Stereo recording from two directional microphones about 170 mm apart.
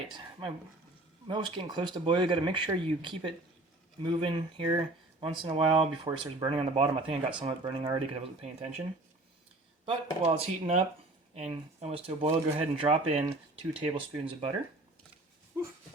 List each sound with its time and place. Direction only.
0.1 s speech: 30° right (ahead or behind)
9.8 s speech: 35° right (ahead or behind)